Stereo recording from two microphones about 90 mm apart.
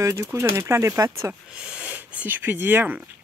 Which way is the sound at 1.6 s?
10° right (ahead or behind).